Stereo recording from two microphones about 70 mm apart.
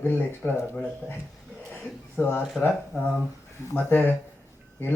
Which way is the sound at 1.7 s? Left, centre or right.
Left.